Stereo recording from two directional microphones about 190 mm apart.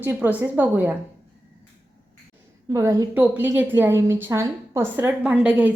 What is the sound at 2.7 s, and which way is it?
A woman's voice, 15° right (ahead or behind).